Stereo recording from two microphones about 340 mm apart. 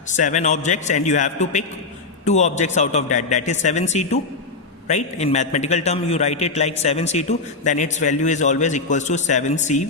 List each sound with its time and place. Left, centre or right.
0.1 s a man's voice: left